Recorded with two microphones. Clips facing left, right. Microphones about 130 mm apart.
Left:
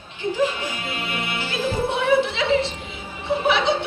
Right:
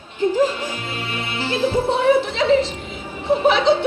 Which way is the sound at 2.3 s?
40° right (ahead or behind).